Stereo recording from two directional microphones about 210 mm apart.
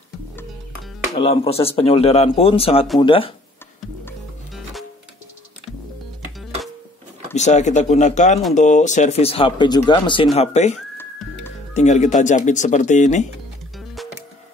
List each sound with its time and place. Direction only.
1.1 s speech: 25° left (ahead or behind)
7.3 s speech: 35° left (ahead or behind)